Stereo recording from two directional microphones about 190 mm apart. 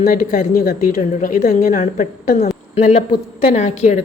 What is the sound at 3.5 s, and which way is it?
Speech, 35° left (ahead or behind).